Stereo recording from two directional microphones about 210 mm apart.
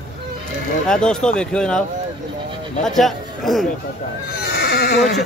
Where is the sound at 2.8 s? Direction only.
Centre (ahead or behind).